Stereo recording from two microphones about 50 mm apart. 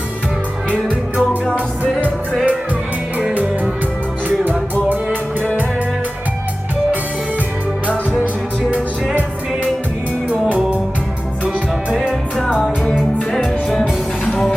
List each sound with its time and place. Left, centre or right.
0.7 s music: right
13.3 s music: centre